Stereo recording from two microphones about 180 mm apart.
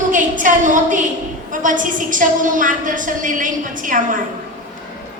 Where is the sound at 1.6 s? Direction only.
45° right (ahead or behind).